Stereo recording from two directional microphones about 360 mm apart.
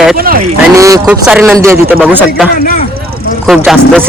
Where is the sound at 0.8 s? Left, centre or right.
Centre.